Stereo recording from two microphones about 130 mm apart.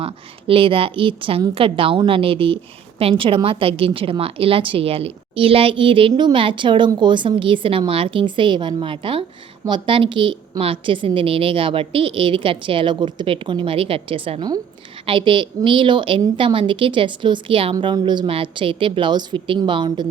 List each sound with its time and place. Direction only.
0.0 s a woman's voice: 45° right (ahead or behind)